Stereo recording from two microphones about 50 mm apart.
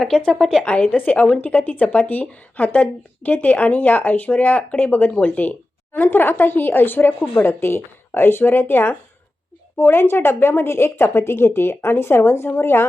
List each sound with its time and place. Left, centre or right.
0.3 s a woman's voice: centre
0.6 s speech: left
7.3 s speech: left